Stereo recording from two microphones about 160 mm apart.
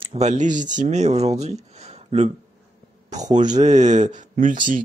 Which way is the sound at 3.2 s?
50° right (ahead or behind).